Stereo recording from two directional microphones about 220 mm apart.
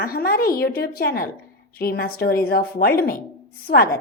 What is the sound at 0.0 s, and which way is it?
A woman's voice, 40° left (ahead or behind).